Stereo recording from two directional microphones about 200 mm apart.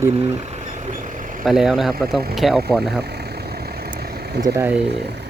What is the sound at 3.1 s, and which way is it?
Vehicle, 50° right (ahead or behind).